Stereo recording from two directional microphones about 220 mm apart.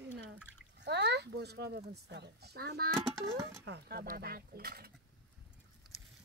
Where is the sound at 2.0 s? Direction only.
50° right (ahead or behind).